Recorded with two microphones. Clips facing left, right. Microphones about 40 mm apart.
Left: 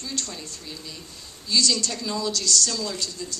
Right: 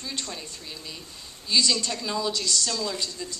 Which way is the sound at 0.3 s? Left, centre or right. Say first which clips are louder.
Left 1 dB; centre.